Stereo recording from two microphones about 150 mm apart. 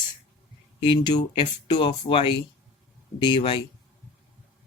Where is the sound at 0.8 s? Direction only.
30° left (ahead or behind).